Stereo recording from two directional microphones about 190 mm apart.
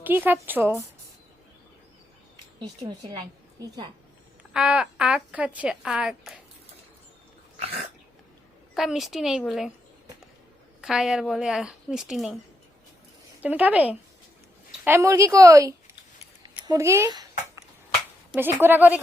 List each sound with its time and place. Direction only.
0.0 s speech: 10° right (ahead or behind)
2.6 s a woman's voice: 20° right (ahead or behind)
4.5 s a woman's voice: 5° right (ahead or behind)
7.6 s dog: 30° right (ahead or behind)
8.7 s a woman's voice: centre (ahead or behind)
10.8 s a woman's voice: 5° right (ahead or behind)
13.4 s speech: 10° right (ahead or behind)
16.4 s a sound: 20° right (ahead or behind)
18.3 s speech: 10° right (ahead or behind)